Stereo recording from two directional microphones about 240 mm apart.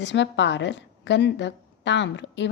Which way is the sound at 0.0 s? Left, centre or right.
Left.